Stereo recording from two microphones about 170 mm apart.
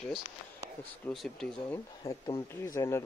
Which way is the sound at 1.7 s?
20° left (ahead or behind).